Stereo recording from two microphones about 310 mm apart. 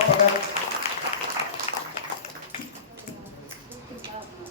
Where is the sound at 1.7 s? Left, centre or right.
Left.